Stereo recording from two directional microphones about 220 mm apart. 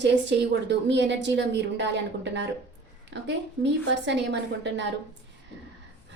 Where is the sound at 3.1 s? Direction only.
55° right (ahead or behind).